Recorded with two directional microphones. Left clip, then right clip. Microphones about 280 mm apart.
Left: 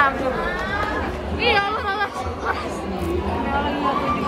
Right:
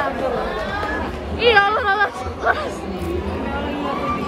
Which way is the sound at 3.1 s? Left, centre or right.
Centre.